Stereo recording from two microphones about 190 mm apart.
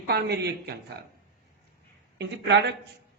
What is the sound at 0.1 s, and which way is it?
Speech, 60° right (ahead or behind).